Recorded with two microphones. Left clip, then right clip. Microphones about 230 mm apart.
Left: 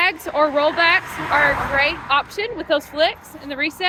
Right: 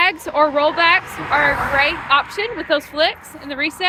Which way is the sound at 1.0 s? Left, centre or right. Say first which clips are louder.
Even; left.